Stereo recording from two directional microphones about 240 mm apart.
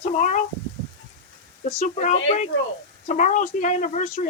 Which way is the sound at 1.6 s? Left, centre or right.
Left.